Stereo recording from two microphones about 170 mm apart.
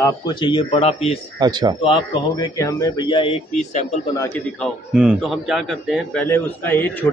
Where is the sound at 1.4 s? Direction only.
25° right (ahead or behind).